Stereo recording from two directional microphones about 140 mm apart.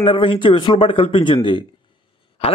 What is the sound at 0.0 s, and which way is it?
A man's voice, 40° left (ahead or behind).